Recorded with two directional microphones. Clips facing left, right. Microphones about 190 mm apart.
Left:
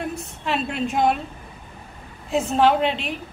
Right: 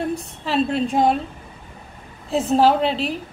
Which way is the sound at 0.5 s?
35° right (ahead or behind).